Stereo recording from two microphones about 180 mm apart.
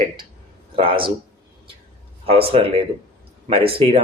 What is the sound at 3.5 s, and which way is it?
Speech, 30° right (ahead or behind).